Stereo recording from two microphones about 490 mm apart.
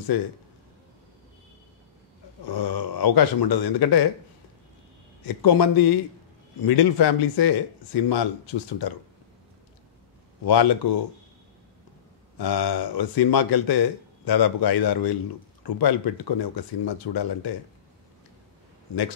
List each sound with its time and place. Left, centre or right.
2.4 s speech: left
5.2 s speech: left
10.4 s speech: left
12.4 s speech: left